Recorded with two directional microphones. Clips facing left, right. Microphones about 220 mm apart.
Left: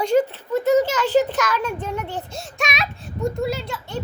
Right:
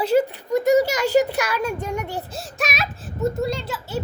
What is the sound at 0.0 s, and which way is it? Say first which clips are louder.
A child's voice: even; 5° right (ahead or behind).